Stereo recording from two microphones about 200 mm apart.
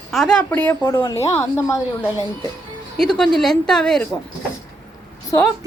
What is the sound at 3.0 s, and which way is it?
A woman's voice, 5° left (ahead or behind).